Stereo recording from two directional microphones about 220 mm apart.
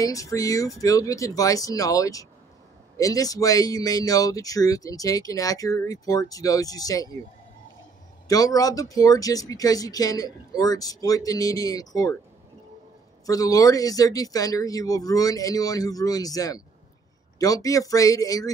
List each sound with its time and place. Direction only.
0.0 s speech: 15° left (ahead or behind)
8.3 s speech: 15° left (ahead or behind)
13.3 s speech: 15° left (ahead or behind)